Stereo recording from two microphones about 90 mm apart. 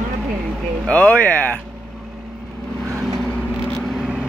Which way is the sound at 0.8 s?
15° left (ahead or behind).